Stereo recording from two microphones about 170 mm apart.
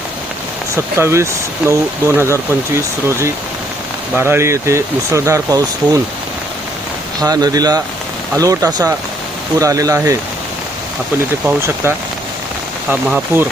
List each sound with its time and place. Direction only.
0.9 s speech: 15° right (ahead or behind)
7.2 s speech: 20° right (ahead or behind)
11.4 s speech: 15° right (ahead or behind)